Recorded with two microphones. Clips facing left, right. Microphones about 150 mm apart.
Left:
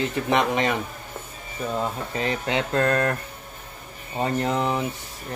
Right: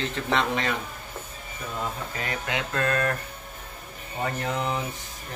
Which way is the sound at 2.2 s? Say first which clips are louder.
Left 6 dB; 30° left (ahead or behind).